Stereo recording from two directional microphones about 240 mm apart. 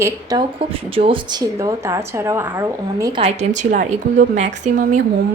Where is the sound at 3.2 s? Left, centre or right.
Right.